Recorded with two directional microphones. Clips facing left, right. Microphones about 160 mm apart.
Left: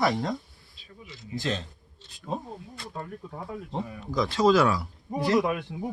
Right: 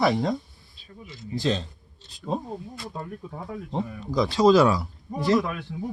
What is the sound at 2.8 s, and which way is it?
Speech, 10° right (ahead or behind).